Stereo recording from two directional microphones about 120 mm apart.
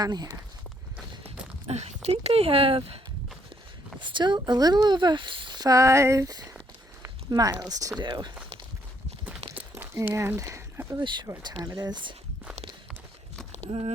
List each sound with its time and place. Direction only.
0.0 s speech: 35° right (ahead or behind)
1.2 s speech: 55° right (ahead or behind)
4.0 s speech: 40° right (ahead or behind)
9.6 s a sound: 20° right (ahead or behind)
11.3 s speech: 35° right (ahead or behind)
12.9 s run: 5° left (ahead or behind)
13.7 s speech: 55° right (ahead or behind)